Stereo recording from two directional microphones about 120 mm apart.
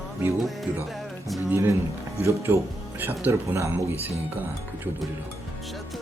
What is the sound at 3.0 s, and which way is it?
Speech, 15° right (ahead or behind).